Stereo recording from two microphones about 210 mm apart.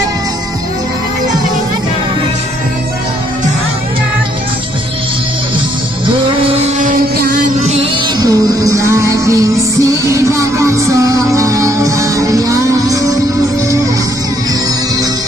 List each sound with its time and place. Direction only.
6.5 s music: 35° right (ahead or behind)
8.2 s music: 15° right (ahead or behind)